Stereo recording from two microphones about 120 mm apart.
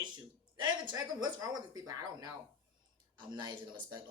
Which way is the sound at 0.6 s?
35° right (ahead or behind).